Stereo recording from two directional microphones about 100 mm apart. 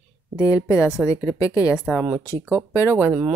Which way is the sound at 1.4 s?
35° left (ahead or behind).